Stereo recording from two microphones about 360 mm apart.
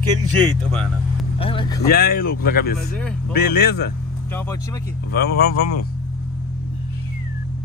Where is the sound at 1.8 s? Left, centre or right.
Left.